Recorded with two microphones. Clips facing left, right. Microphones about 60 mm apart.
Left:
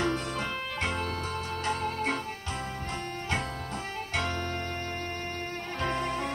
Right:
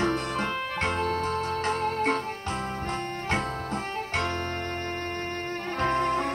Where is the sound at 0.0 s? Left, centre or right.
Right.